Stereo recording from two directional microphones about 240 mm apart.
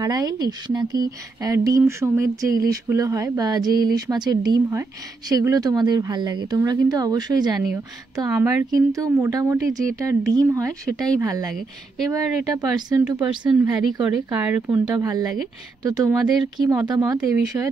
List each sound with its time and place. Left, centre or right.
0.0 s a woman's voice: centre
10.9 s speech: centre
11.1 s a woman's voice: centre
14.0 s a woman's voice: centre